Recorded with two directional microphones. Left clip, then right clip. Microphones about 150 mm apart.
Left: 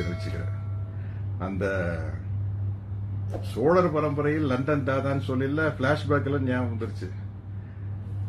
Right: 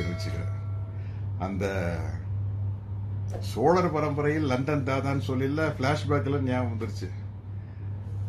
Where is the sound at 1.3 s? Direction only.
25° right (ahead or behind).